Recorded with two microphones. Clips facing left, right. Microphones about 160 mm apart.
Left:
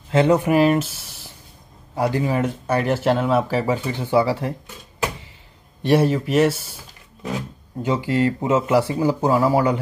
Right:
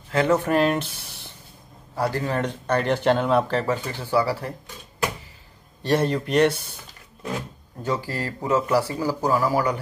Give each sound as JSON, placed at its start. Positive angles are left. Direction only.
{"t": 0.1, "sound": "speech", "side_deg": 20}
{"t": 0.4, "sound": "speech", "side_deg": 10}
{"t": 2.0, "sound": "speech", "side_deg": 15}
{"t": 5.8, "sound": "speech", "side_deg": 10}
{"t": 7.8, "sound": "speech", "side_deg": 20}